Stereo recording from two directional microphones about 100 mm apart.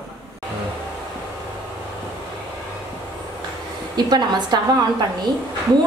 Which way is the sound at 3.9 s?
45° right (ahead or behind).